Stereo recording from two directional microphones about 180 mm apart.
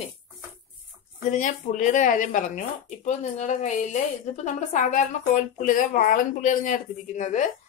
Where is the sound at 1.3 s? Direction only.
45° left (ahead or behind).